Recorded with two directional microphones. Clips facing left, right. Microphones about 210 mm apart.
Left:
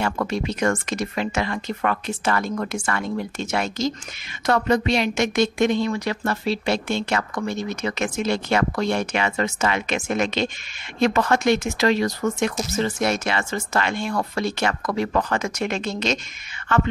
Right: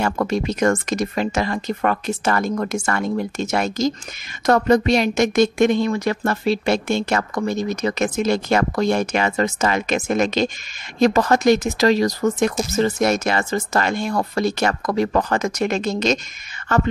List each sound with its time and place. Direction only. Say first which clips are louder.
0.0 s a woman's voice: right 3 dB; 45° right (ahead or behind)